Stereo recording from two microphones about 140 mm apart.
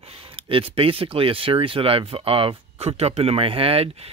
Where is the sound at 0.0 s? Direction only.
40° right (ahead or behind).